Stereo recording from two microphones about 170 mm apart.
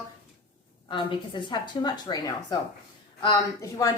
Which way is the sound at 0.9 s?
30° left (ahead or behind).